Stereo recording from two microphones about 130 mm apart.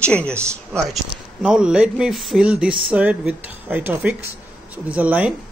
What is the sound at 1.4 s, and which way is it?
Speech, 5° right (ahead or behind).